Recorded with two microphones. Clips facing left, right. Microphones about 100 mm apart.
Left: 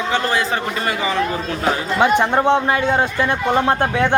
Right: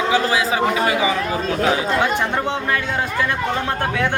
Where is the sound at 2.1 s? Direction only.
30° left (ahead or behind).